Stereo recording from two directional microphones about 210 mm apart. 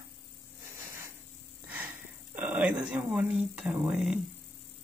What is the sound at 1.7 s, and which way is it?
Speech, 10° right (ahead or behind).